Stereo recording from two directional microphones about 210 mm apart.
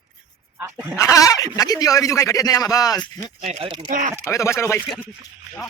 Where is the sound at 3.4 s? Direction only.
30° right (ahead or behind).